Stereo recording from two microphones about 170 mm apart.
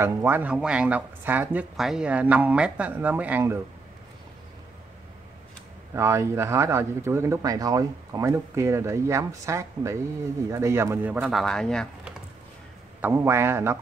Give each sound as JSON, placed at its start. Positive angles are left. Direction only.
{"t": 0.0, "sound": "speech", "side_deg": -15}
{"t": 5.9, "sound": "speech", "side_deg": -15}
{"t": 13.0, "sound": "speech", "side_deg": -15}